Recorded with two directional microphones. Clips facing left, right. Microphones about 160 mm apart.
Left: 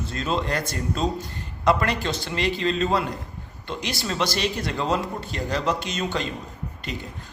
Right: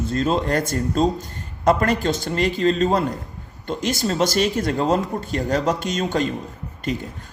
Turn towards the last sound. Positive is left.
turn(degrees=-45)  # may be behind; listen again after turning